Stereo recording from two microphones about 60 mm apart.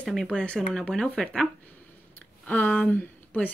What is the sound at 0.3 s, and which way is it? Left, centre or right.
Speech, centre.